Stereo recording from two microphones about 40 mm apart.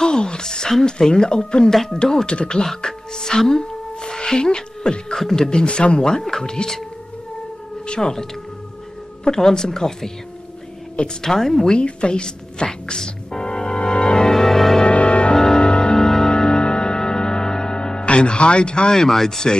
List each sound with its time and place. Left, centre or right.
0.0 s a sound: left
0.8 s speech: centre
1.7 s speech: centre
2.2 s speech: left
2.6 s speech: centre
4.0 s music: centre
5.3 s speech: centre
7.8 s whale vocalization: left
9.4 s speech: centre
11.2 s speech: centre
11.8 s music: left; by 14.9 s centre
14.9 s music: left
15.3 s music: centre